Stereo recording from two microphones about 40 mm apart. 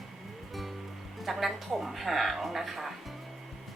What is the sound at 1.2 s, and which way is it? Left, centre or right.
A woman's voice, centre.